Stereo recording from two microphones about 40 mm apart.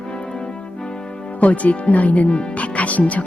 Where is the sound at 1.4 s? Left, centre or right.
Left.